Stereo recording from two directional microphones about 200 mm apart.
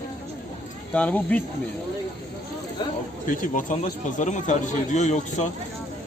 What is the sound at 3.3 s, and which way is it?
A man's voice, 40° left (ahead or behind).